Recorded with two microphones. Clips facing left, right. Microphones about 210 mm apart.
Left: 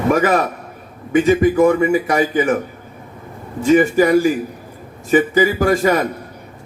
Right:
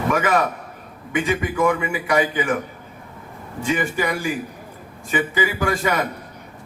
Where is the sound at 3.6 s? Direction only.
40° left (ahead or behind).